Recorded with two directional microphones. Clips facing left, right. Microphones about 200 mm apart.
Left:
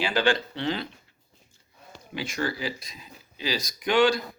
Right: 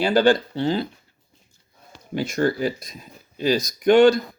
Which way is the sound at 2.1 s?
45° right (ahead or behind).